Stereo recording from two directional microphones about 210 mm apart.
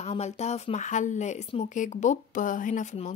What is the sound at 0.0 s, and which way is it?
Speech, 30° left (ahead or behind).